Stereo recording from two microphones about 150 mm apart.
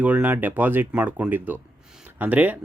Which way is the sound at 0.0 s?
10° right (ahead or behind).